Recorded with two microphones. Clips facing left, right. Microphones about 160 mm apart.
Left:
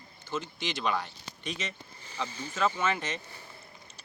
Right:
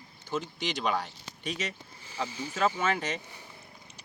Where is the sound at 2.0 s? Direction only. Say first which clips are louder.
Right 2 dB; 5° right (ahead or behind).